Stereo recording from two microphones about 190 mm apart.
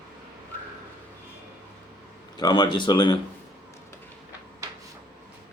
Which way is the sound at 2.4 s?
25° left (ahead or behind).